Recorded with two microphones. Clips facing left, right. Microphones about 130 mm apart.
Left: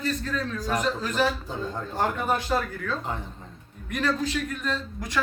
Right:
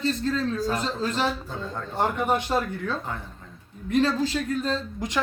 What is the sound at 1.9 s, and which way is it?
A man's voice, 20° right (ahead or behind).